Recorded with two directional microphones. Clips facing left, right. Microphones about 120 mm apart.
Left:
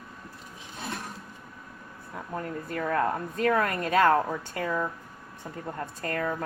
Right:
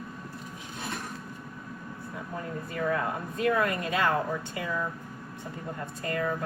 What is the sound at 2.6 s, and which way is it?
Speech, 50° left (ahead or behind).